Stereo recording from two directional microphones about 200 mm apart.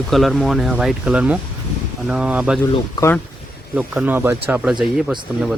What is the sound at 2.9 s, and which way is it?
Speech, 15° left (ahead or behind).